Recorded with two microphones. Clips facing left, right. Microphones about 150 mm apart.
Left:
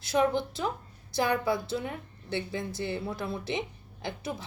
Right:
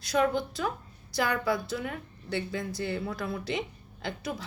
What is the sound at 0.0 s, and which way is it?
A woman's voice, 25° left (ahead or behind).